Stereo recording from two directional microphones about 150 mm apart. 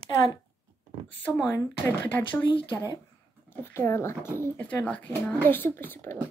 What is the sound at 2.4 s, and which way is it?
Speech, 30° left (ahead or behind).